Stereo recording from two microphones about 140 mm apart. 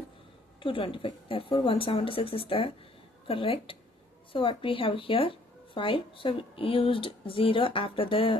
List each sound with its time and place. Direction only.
0.6 s speech: 40° left (ahead or behind)